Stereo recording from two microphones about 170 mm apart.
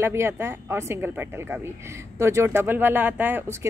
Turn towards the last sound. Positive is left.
turn(degrees=-15)  # may be behind; listen again after turning